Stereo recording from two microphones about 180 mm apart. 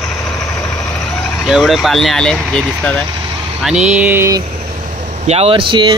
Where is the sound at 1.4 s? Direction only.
Centre (ahead or behind).